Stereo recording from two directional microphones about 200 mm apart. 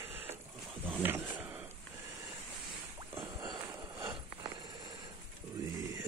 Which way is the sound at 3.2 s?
20° right (ahead or behind).